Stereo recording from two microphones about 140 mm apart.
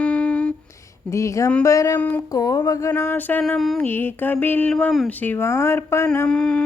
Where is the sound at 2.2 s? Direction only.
25° left (ahead or behind).